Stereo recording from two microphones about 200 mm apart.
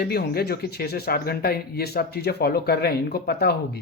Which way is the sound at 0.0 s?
50° left (ahead or behind).